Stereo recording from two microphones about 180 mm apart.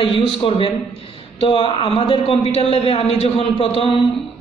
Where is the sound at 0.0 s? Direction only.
30° left (ahead or behind).